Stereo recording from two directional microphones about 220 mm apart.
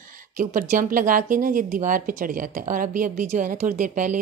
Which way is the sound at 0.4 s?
35° right (ahead or behind).